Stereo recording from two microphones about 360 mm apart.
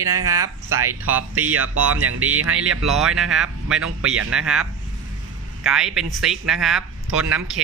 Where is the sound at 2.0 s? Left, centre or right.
Right.